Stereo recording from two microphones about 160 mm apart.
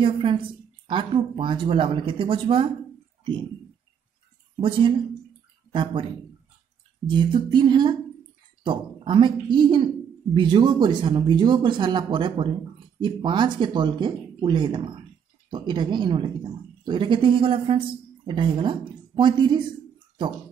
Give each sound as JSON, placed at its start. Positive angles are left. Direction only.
{"t": 0.0, "sound": "a woman's voice", "side_deg": -35}
{"t": 4.6, "sound": "a woman's voice", "side_deg": -35}
{"t": 7.1, "sound": "a woman's voice", "side_deg": -30}